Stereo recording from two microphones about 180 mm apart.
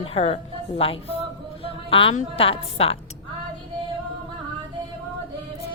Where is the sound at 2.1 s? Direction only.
30° left (ahead or behind).